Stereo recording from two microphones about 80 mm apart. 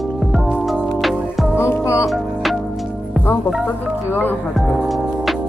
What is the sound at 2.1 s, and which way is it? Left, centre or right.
Music, centre.